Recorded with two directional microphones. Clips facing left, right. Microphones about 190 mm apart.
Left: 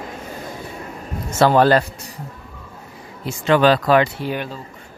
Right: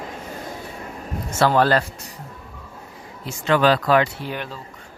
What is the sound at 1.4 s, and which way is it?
Speech, 20° left (ahead or behind).